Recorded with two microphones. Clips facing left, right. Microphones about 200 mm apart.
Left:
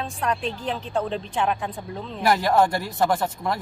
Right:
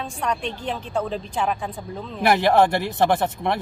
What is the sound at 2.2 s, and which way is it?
A man's voice, 25° right (ahead or behind).